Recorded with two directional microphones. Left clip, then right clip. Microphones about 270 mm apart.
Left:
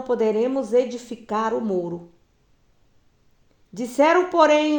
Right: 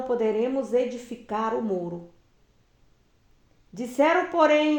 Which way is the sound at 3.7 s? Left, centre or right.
Left.